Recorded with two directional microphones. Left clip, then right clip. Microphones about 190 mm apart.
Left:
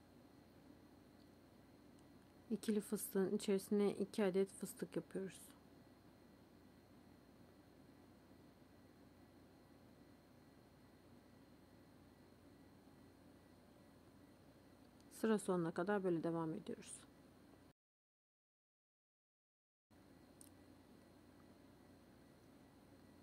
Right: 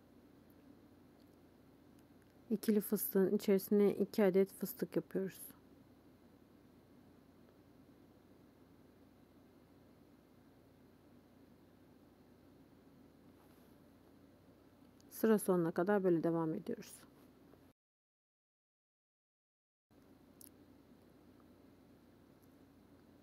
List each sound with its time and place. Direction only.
2.5 s speech: 20° right (ahead or behind)
15.1 s a woman's voice: 15° right (ahead or behind)